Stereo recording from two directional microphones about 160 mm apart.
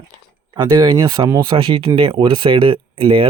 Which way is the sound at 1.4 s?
35° right (ahead or behind).